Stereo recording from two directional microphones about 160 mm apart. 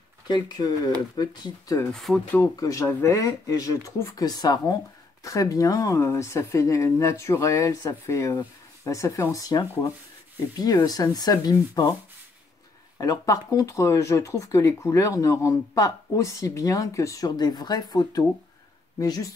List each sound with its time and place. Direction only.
0.3 s speech: 25° left (ahead or behind)
2.0 s speech: centre (ahead or behind)
2.3 s speech: 20° left (ahead or behind)
12.9 s speech: 25° left (ahead or behind)